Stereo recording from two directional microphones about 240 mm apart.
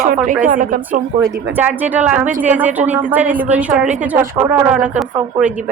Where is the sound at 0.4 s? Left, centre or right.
Right.